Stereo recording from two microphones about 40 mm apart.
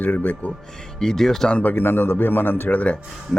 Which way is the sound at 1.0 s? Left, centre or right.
Centre.